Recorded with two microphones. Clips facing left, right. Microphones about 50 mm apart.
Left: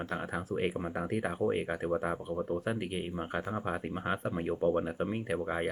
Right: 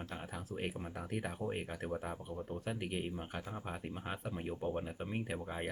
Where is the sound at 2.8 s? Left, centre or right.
Centre.